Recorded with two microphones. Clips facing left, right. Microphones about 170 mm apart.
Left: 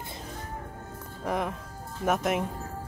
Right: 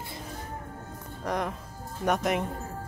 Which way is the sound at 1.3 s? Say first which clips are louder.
Left 1 dB; 5° left (ahead or behind).